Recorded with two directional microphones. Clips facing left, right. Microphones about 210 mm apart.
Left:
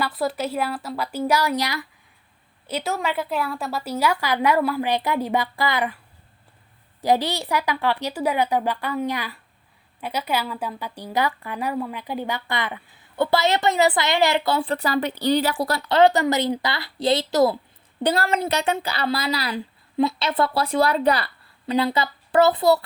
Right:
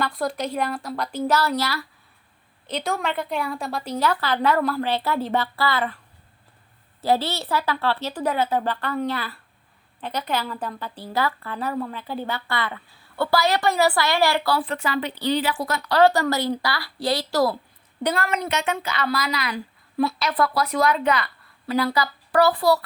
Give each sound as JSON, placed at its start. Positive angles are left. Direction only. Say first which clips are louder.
{"t": 0.0, "sound": "a woman's voice", "louder": "left 1 dB", "side_deg": 5}
{"t": 2.6, "sound": "a woman's voice", "louder": "left 1 dB", "side_deg": 5}
{"t": 7.0, "sound": "a woman's voice", "louder": "left 1 dB", "side_deg": 15}
{"t": 15.9, "sound": "speech", "louder": "left 1 dB", "side_deg": 20}
{"t": 18.0, "sound": "speech", "louder": "left 3 dB", "side_deg": 35}
{"t": 21.7, "sound": "speech", "louder": "left 1 dB", "side_deg": 20}